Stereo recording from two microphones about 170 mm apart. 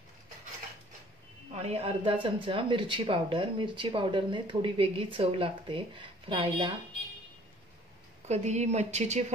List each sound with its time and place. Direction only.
1.5 s speech: 35° right (ahead or behind)
8.3 s speech: 40° right (ahead or behind)